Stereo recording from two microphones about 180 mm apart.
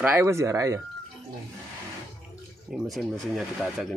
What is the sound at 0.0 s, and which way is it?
Speech, 10° right (ahead or behind).